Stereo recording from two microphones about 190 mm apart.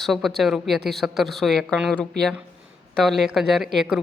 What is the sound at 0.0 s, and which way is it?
Speech, centre (ahead or behind).